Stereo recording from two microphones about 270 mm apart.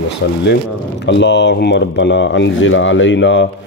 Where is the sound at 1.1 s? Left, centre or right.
Left.